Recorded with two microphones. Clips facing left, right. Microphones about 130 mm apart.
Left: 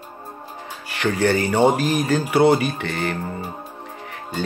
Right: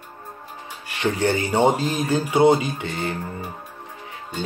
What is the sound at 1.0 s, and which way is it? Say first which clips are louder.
Speech: left 2 dB; 25° right (ahead or behind).